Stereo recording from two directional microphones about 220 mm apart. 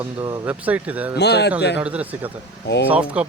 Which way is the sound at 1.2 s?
50° left (ahead or behind).